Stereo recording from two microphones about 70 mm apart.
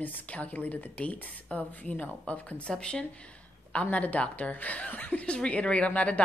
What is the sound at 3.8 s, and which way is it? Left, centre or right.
A woman's voice, left.